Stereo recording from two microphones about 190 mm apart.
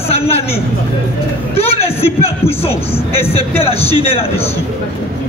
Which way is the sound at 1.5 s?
30° left (ahead or behind).